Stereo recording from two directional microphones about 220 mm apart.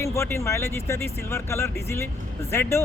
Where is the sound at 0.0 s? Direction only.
15° left (ahead or behind).